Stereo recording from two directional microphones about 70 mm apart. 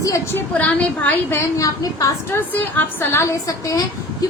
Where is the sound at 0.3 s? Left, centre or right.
Left.